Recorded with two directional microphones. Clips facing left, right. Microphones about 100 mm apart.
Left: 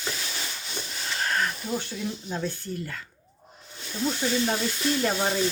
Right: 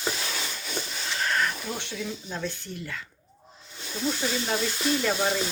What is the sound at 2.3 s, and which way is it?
Speech, 40° left (ahead or behind).